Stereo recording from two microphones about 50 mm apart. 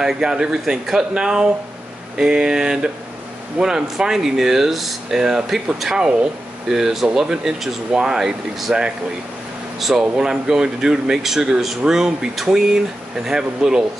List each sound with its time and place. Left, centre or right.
0.0 s speech: centre
9.8 s speech: centre
10.1 s speech: centre